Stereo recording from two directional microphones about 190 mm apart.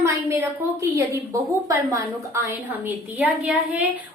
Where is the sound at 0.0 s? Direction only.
15° right (ahead or behind).